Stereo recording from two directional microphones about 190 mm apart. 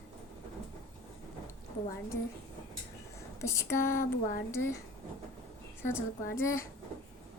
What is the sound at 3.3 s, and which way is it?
Speech, 15° left (ahead or behind).